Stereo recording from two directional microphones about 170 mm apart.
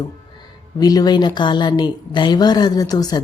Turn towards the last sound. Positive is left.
turn(degrees=20)  # may be behind; listen again after turning